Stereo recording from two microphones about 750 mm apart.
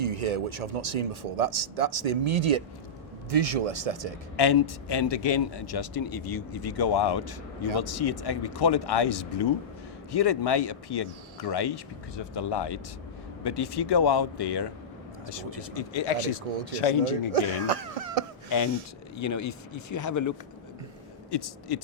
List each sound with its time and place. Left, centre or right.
0.0 s speech: right
4.4 s speech: left
15.7 s speech: left
17.3 s cough: right
18.4 s speech: left